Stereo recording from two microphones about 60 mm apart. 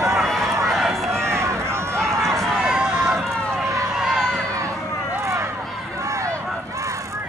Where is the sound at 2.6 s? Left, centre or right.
Centre.